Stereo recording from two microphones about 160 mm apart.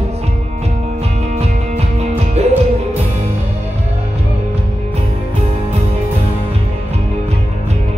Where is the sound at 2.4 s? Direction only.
40° right (ahead or behind).